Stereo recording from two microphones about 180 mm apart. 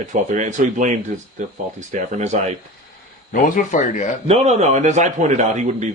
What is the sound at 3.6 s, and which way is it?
Speech, 45° left (ahead or behind).